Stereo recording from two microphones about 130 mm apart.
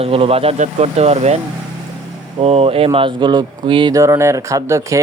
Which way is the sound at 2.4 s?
50° right (ahead or behind).